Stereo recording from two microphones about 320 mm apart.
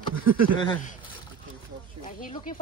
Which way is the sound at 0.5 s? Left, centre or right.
Centre.